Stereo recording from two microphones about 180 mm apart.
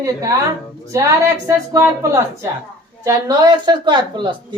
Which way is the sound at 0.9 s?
15° right (ahead or behind).